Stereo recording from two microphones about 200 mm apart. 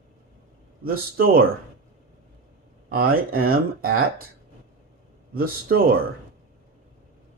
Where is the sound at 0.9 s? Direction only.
45° right (ahead or behind).